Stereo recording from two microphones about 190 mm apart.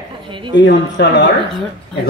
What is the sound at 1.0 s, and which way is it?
Speech, 60° left (ahead or behind).